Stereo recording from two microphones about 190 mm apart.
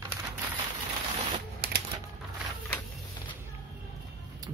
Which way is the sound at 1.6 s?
60° right (ahead or behind).